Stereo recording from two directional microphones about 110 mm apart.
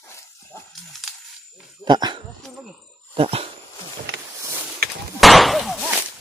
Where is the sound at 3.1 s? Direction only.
60° right (ahead or behind).